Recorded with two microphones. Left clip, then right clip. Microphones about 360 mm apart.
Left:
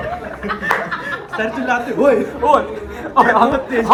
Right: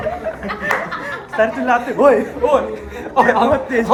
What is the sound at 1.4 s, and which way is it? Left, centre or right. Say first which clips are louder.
Speech: right 4 dB; centre.